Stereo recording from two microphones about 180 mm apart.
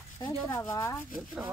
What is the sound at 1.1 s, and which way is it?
Speech, centre (ahead or behind).